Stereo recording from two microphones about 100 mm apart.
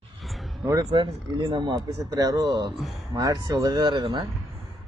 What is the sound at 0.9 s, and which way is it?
Speech, 50° right (ahead or behind).